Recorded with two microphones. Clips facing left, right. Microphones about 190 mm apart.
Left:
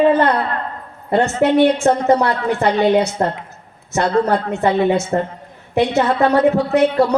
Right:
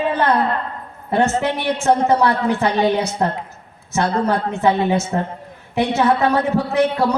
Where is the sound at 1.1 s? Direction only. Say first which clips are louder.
Left 3 dB; 60° left (ahead or behind).